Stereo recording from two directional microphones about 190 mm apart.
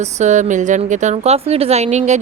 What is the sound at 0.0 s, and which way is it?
A woman's voice, 40° right (ahead or behind).